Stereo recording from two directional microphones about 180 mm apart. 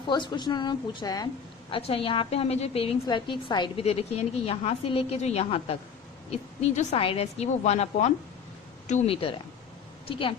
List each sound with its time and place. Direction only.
0.1 s a woman's voice: 25° left (ahead or behind)